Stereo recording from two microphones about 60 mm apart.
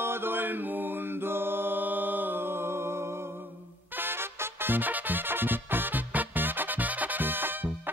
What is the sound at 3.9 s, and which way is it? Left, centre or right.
Music, right.